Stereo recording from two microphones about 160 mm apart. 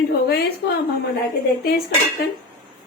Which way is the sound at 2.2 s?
90° left.